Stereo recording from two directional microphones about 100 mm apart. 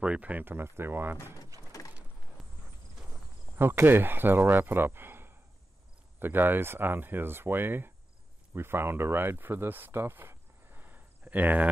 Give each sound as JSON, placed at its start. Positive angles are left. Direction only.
{"t": 0.0, "sound": "speech", "side_deg": -10}
{"t": 2.4, "sound": "clip-clop", "side_deg": 0}
{"t": 3.5, "sound": "speech", "side_deg": -20}